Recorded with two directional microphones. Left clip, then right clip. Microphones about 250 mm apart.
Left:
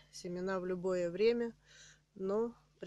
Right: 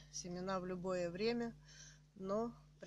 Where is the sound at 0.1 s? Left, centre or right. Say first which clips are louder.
Left 4 dB; left.